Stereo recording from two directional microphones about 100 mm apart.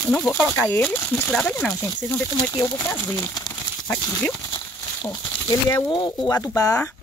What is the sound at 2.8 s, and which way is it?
Speech, 25° left (ahead or behind).